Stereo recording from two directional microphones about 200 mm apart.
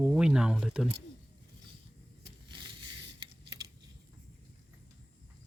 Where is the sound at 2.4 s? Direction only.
20° right (ahead or behind).